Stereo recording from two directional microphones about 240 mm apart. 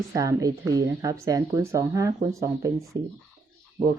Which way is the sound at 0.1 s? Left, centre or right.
Centre.